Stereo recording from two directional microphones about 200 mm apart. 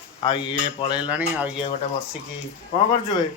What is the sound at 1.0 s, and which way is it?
Speech, 5° right (ahead or behind).